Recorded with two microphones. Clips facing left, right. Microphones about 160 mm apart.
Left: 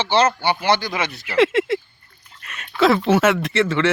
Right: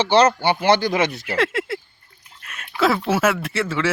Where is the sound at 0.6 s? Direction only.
50° right (ahead or behind).